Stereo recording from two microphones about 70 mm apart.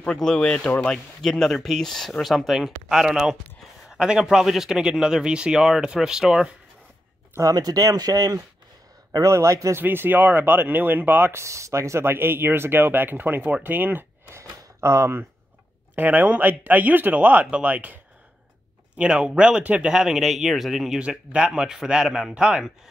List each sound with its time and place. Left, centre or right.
0.0 s speech: centre
7.5 s speech: right
9.3 s a man's voice: right
9.8 s speech: right
14.8 s a man's voice: right
16.0 s speech: right
18.9 s speech: centre
21.0 s speech: centre